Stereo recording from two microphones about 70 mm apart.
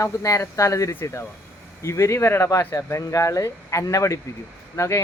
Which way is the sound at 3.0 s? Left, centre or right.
Left.